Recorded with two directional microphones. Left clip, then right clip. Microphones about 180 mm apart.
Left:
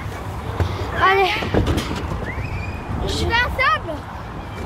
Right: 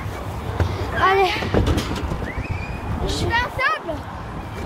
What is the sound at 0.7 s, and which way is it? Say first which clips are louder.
Vehicle: left 1 dB; 15° right (ahead or behind).